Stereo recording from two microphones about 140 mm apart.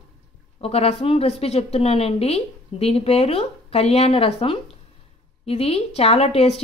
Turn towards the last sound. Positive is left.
turn(degrees=45)  # may be behind; listen again after turning